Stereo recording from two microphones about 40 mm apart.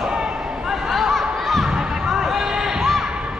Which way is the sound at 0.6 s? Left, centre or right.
Centre.